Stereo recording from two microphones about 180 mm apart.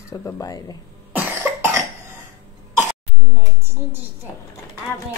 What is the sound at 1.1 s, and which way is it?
Cough, 10° right (ahead or behind).